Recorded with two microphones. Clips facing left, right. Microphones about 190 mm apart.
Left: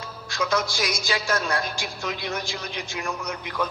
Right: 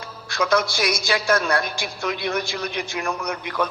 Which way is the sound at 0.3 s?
65° right (ahead or behind).